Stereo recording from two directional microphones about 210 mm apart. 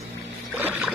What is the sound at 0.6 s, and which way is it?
Rowboat, 5° right (ahead or behind).